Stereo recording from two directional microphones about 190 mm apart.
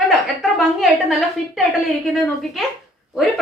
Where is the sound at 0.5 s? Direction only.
Centre (ahead or behind).